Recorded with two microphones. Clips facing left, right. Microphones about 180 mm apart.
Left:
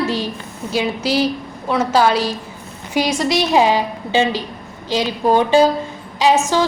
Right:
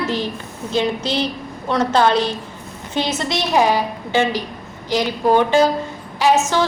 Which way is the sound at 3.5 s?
15° left (ahead or behind).